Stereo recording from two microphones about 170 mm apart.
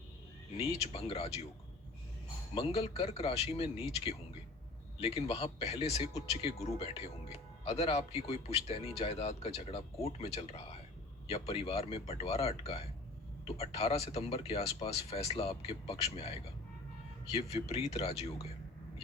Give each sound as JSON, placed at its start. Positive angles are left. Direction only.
{"t": 0.5, "sound": "speech", "side_deg": 35}
{"t": 2.6, "sound": "speech", "side_deg": 35}
{"t": 17.3, "sound": "speech", "side_deg": 40}